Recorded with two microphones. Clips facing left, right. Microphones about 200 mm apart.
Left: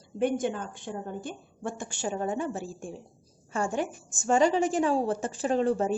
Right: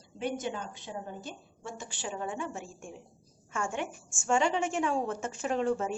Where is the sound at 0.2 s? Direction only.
50° left (ahead or behind).